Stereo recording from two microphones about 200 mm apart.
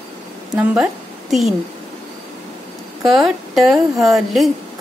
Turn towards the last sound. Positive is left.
turn(degrees=0)  # may be behind; listen again after turning